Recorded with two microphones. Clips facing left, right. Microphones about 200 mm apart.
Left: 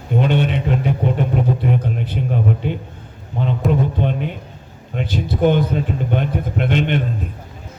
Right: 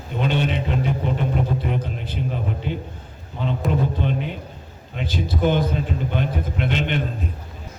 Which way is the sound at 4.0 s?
50° left (ahead or behind).